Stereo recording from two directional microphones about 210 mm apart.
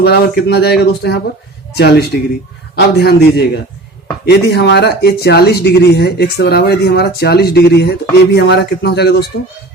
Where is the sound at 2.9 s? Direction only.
50° left (ahead or behind).